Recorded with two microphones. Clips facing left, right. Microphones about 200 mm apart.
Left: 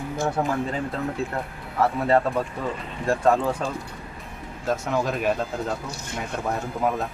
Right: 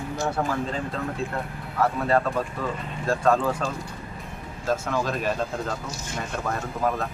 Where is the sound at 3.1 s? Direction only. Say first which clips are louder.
Left 1 dB; 20° left (ahead or behind).